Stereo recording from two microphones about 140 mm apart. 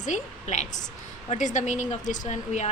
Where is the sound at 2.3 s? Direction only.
50° left (ahead or behind).